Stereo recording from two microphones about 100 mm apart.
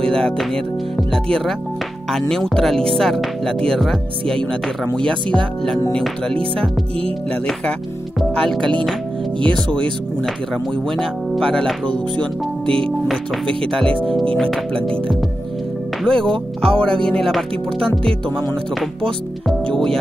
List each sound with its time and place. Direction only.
0.0 s music: 5° left (ahead or behind)
0.9 s speech: 5° left (ahead or behind)
8.2 s speech: 5° left (ahead or behind)
10.2 s speech: 5° left (ahead or behind)
12.6 s speech: 65° right (ahead or behind)
14.3 s speech: 5° left (ahead or behind)
16.0 s speech: 5° left (ahead or behind)
19.6 s speech: 5° left (ahead or behind)